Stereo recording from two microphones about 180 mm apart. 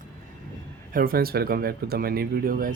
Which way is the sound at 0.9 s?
55° right (ahead or behind).